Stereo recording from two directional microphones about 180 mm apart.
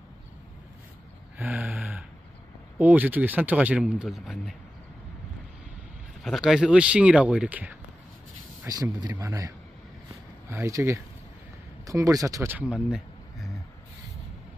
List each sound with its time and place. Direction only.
1.5 s gasp: 5° right (ahead or behind)
2.8 s speech: 10° right (ahead or behind)
6.2 s speech: centre (ahead or behind)
8.6 s speech: 20° right (ahead or behind)
10.5 s speech: 15° right (ahead or behind)